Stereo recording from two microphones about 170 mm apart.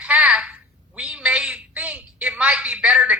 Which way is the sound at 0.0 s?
5° right (ahead or behind).